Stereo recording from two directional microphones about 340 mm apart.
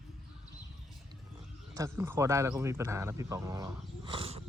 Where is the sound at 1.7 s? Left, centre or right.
Centre.